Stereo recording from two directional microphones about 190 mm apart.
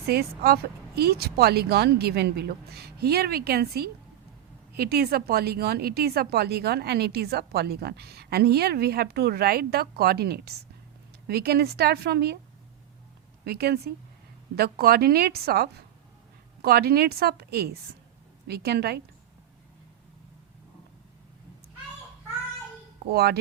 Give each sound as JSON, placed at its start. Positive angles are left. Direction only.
{"t": 0.0, "sound": "a woman's voice", "side_deg": -55}
{"t": 13.4, "sound": "a woman's voice", "side_deg": -55}
{"t": 23.0, "sound": "a woman's voice", "side_deg": -55}